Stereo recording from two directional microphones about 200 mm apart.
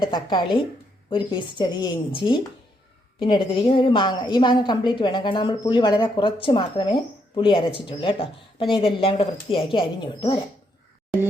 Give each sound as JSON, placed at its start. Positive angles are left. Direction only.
{"t": 0.0, "sound": "a woman's voice", "side_deg": 20}